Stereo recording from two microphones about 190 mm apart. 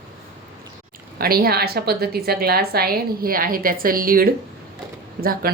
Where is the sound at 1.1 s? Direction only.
50° right (ahead or behind).